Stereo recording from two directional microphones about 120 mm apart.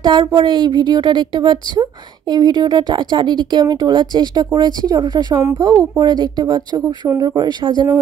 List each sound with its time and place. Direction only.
0.0 s a woman's voice: 40° right (ahead or behind)